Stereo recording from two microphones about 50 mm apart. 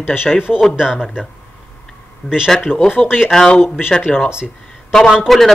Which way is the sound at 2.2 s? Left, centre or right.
Centre.